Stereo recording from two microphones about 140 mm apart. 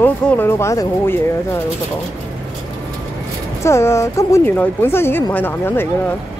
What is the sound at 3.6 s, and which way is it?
Speech, 20° left (ahead or behind).